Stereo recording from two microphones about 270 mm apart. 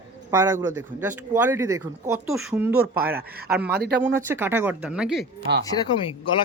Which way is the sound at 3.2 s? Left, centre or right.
Right.